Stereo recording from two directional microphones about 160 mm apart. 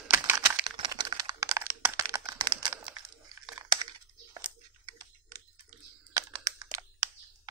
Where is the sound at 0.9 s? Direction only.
25° right (ahead or behind).